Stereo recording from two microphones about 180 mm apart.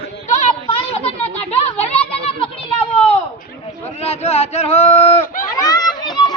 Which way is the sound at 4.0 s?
35° left (ahead or behind).